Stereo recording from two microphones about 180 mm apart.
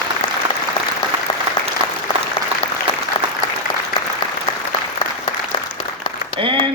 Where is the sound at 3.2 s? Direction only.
30° left (ahead or behind).